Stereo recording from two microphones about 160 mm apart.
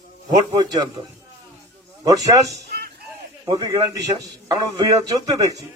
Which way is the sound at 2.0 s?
20° right (ahead or behind).